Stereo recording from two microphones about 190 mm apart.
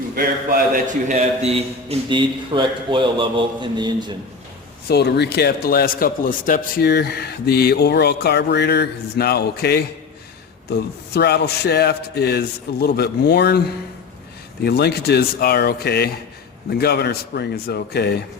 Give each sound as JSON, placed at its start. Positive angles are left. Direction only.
{"t": 0.2, "sound": "a man's voice", "side_deg": -45}
{"t": 4.9, "sound": "speech", "side_deg": 60}
{"t": 14.6, "sound": "speech", "side_deg": 55}